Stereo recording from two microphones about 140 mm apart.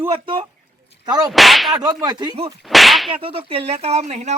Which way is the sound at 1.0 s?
30° right (ahead or behind).